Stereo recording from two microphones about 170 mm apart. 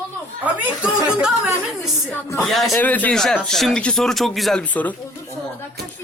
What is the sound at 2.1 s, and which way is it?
Speech, 10° left (ahead or behind).